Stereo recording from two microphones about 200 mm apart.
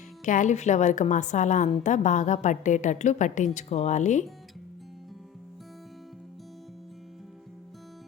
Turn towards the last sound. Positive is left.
turn(degrees=0)  # may be behind; listen again after turning